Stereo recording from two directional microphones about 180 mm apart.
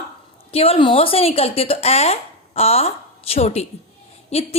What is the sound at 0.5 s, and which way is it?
A woman's voice, 30° left (ahead or behind).